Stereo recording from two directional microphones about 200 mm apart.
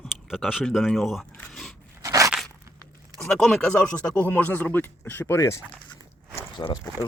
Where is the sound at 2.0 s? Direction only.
15° right (ahead or behind).